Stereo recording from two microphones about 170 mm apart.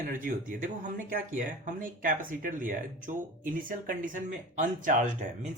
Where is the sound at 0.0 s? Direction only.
55° right (ahead or behind).